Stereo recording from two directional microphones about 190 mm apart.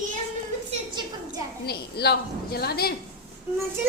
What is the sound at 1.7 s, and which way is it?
A woman's voice, 60° left (ahead or behind).